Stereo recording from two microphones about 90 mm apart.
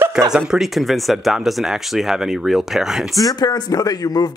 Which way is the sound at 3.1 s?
45° left (ahead or behind).